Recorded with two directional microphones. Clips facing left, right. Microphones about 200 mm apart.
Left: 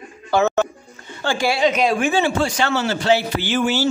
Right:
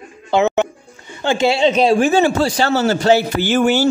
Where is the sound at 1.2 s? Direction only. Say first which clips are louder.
Right 4 dB; 20° right (ahead or behind); by 3.8 s 50° right (ahead or behind).